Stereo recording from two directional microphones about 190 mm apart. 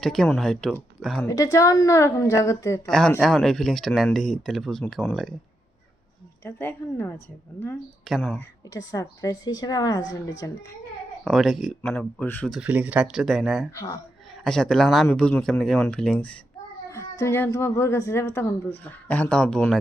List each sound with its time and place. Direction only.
0.0 s speech: 5° left (ahead or behind)
1.2 s speech: 15° left (ahead or behind)
2.9 s speech: centre (ahead or behind)
6.4 s speech: 10° left (ahead or behind)
8.0 s speech: centre (ahead or behind)
8.4 s speech: 15° left (ahead or behind)
11.2 s speech: centre (ahead or behind)
12.5 s speech: 5° right (ahead or behind)